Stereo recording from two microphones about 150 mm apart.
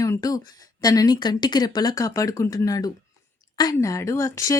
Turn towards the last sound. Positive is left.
turn(degrees=20)  # may be behind; listen again after turning